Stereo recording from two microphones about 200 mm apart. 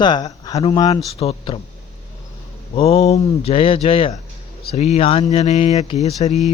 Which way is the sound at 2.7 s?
30° left (ahead or behind).